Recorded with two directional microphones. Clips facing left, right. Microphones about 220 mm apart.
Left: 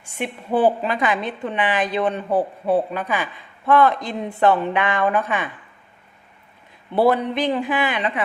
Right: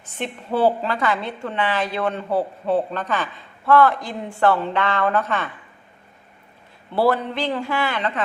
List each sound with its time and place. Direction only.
0.0 s a woman's voice: 15° left (ahead or behind)
6.9 s a woman's voice: 20° left (ahead or behind)